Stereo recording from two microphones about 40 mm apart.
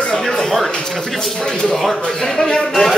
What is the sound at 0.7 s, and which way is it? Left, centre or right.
Speech, left.